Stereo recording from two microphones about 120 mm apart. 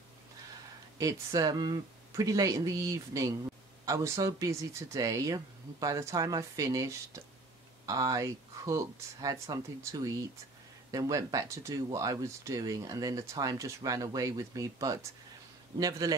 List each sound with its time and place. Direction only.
0.9 s a man's voice: 30° right (ahead or behind)